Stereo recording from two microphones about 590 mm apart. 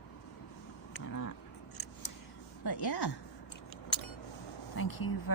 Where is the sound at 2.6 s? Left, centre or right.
Left.